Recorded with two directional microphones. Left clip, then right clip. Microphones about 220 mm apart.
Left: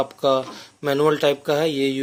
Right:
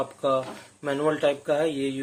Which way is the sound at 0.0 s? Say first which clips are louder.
Left 5 dB; 50° left (ahead or behind).